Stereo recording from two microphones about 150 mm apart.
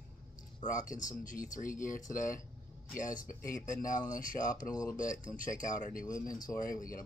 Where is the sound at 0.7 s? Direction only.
60° left (ahead or behind).